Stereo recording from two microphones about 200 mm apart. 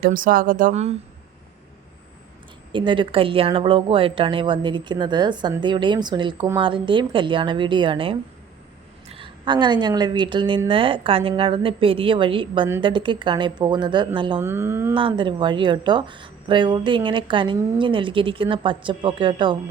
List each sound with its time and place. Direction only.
0.0 s speech: 45° right (ahead or behind)
2.7 s a woman's voice: 25° right (ahead or behind)
14.4 s speech: 10° right (ahead or behind)
14.9 s a woman's voice: 25° right (ahead or behind)